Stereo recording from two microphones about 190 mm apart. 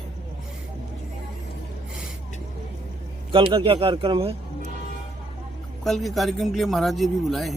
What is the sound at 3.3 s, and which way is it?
A man's voice, 25° right (ahead or behind).